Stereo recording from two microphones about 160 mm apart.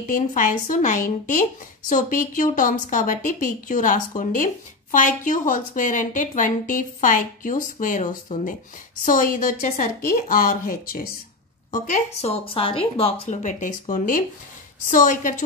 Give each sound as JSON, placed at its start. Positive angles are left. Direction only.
{"t": 0.1, "sound": "a woman's voice", "side_deg": 55}
{"t": 11.7, "sound": "a woman's voice", "side_deg": 45}